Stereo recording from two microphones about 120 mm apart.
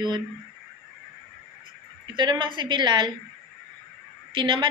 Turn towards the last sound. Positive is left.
turn(degrees=-45)  # may be behind; listen again after turning